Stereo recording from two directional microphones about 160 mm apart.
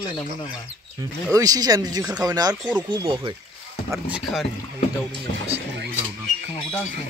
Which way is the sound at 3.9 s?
5° right (ahead or behind).